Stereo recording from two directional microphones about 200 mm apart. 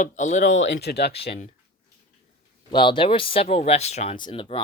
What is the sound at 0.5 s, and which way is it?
Speech, 65° left (ahead or behind).